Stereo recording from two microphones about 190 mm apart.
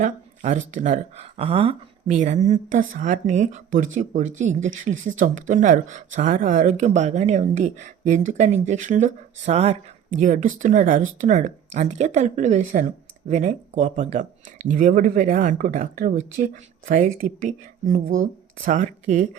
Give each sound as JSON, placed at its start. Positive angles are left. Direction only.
{"t": 0.0, "sound": "speech", "side_deg": -40}